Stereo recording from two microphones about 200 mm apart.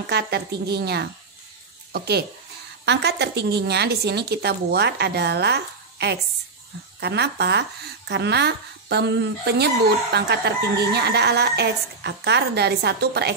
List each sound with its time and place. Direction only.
0.0 s speech: 55° right (ahead or behind)